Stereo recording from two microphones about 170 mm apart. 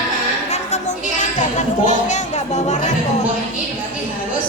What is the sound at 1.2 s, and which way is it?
Speech, 45° left (ahead or behind).